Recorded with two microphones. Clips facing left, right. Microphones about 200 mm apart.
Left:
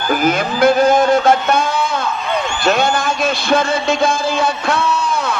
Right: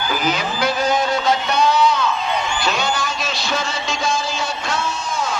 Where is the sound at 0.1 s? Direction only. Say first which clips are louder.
Left 8 dB; 50° left (ahead or behind).